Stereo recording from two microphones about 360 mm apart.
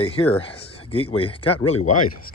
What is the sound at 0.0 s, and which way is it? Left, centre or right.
Speech, centre.